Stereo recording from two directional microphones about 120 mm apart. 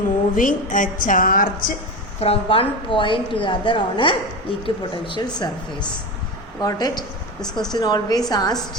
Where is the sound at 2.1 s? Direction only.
55° left (ahead or behind).